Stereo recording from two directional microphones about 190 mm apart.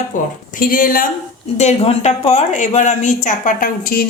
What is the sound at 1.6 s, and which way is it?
Speech, 35° left (ahead or behind).